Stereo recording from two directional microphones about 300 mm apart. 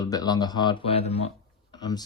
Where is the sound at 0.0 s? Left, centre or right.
Centre.